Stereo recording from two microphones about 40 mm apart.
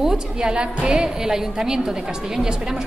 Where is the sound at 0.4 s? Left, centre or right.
Right.